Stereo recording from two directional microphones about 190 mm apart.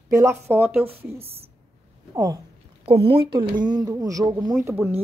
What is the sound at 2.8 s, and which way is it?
Speech, 30° right (ahead or behind).